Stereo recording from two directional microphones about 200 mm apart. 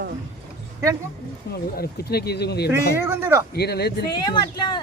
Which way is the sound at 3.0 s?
10° right (ahead or behind).